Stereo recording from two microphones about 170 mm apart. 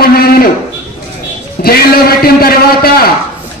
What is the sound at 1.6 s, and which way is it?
A man's voice, 60° left (ahead or behind).